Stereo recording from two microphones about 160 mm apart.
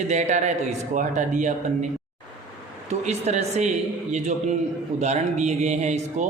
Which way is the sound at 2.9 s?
45° right (ahead or behind).